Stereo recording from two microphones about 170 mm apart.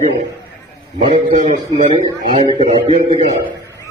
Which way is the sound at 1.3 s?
45° right (ahead or behind).